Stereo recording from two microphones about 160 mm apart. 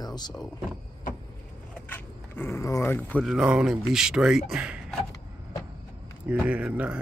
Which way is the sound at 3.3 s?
5° right (ahead or behind).